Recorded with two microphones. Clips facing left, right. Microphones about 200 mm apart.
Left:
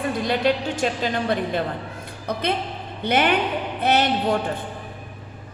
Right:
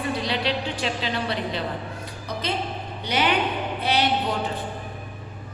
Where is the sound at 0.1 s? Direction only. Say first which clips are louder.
Left 5 dB; 50° left (ahead or behind).